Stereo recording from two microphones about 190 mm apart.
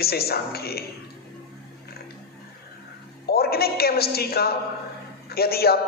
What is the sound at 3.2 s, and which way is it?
A woman's voice, 55° left (ahead or behind).